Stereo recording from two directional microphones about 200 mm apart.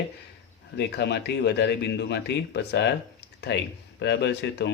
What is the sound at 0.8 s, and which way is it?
Speech, 55° left (ahead or behind).